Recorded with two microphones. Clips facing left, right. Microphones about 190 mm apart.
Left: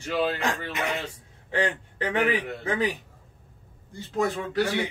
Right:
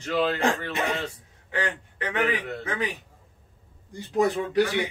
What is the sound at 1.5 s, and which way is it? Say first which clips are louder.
Speech: left 3 dB; 30° left (ahead or behind).